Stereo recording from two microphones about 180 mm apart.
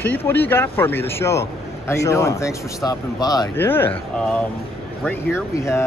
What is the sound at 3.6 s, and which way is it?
Speech, 10° left (ahead or behind).